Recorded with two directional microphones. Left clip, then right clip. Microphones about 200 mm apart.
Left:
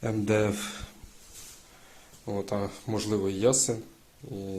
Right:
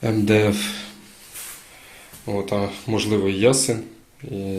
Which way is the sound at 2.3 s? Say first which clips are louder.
Right 8 dB; 25° left (ahead or behind).